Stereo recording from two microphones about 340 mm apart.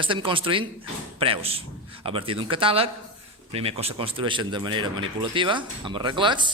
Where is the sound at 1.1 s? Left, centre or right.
Centre.